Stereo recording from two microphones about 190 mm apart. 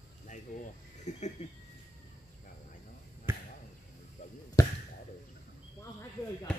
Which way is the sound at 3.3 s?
10° right (ahead or behind).